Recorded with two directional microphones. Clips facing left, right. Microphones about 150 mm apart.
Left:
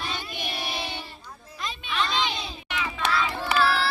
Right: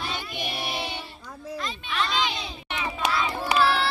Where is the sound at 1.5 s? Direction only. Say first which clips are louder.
Even; centre (ahead or behind).